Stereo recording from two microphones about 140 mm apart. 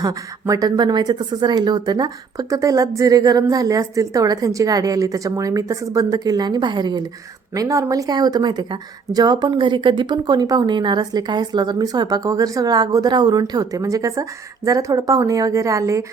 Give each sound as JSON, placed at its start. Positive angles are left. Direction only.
{"t": 0.0, "sound": "speech", "side_deg": -25}